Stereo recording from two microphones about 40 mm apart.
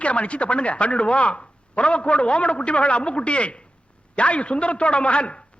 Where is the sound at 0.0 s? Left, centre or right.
Left.